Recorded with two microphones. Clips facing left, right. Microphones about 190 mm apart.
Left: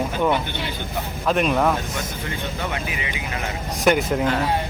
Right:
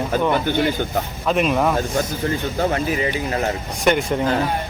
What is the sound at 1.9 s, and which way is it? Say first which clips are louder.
Speech: right 8 dB; 35° right (ahead or behind).